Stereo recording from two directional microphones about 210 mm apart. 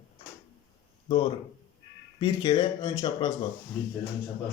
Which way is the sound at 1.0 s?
20° left (ahead or behind).